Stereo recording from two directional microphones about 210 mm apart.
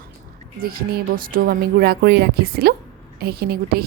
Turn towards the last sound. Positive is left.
turn(degrees=-45)  # may be behind; listen again after turning